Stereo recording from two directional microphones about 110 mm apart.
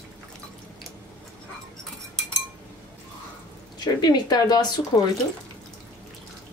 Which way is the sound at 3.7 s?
40° left (ahead or behind).